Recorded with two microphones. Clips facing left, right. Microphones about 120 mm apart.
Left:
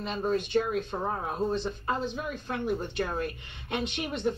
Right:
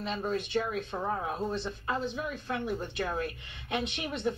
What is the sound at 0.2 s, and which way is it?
Speech, 20° left (ahead or behind).